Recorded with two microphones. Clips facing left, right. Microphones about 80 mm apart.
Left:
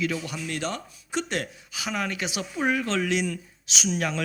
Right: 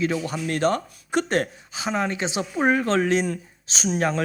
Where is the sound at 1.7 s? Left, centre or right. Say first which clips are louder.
Right 4 dB; right.